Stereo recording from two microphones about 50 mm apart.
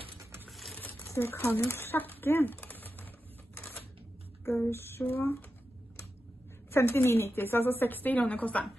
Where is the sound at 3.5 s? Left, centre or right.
Left.